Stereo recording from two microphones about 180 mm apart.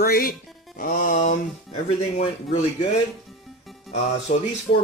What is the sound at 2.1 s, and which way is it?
Speech, 40° left (ahead or behind).